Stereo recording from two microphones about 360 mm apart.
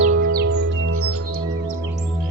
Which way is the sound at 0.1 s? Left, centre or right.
Right.